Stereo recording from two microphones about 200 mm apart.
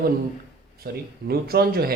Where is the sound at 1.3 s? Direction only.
50° right (ahead or behind).